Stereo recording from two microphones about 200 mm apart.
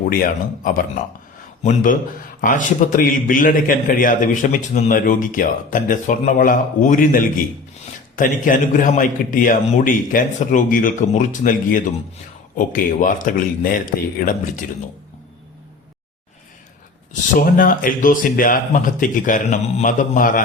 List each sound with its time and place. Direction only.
0.0 s a man's voice: 45° left (ahead or behind)
17.1 s speech: 45° left (ahead or behind)